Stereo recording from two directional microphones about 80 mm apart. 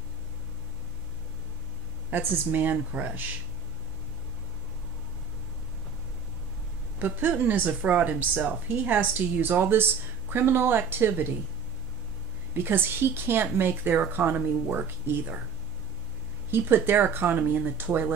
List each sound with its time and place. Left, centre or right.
2.0 s speech: right
7.0 s speech: right
12.5 s speech: right
16.4 s speech: right